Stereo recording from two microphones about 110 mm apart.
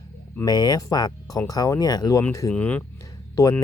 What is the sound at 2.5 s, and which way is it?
Speech, 15° left (ahead or behind).